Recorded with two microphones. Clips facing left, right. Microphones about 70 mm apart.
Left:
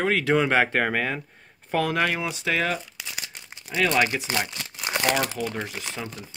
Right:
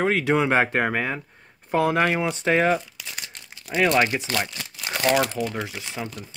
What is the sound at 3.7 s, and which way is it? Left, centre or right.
Speech, right.